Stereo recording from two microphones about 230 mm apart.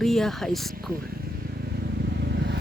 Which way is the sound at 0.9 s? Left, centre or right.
Right.